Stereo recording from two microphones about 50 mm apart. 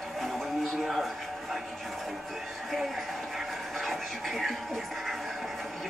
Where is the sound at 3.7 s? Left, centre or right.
Centre.